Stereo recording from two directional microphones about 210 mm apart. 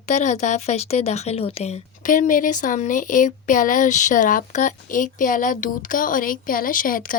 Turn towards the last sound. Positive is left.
turn(degrees=40)  # may be behind; listen again after turning